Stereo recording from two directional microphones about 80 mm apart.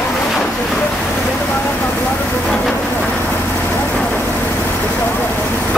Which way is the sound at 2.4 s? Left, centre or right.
Centre.